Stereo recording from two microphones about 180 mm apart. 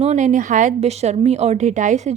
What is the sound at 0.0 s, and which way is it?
A woman's voice, 40° right (ahead or behind).